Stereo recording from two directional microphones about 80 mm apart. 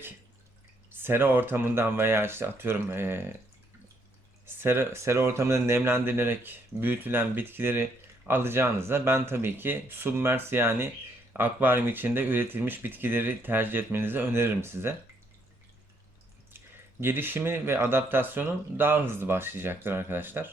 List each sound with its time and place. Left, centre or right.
0.9 s speech: right
4.4 s speech: right
17.0 s speech: right